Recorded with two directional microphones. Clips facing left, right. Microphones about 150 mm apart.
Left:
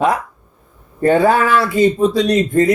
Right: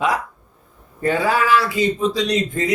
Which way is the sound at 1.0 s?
50° left (ahead or behind).